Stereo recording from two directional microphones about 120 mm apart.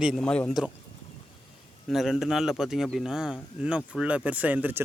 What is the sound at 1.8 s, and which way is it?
A man's voice, 5° right (ahead or behind).